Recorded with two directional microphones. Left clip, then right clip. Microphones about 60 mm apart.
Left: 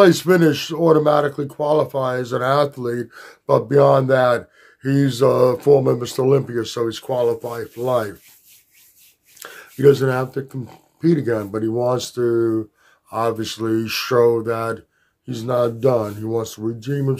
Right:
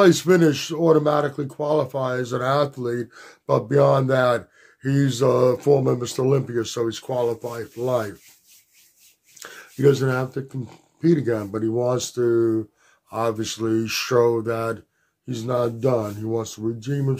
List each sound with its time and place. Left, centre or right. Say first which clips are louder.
0.0 s speech: left 3 dB; left
9.4 s speech: left 4 dB; left
15.2 s speech: left 4 dB; left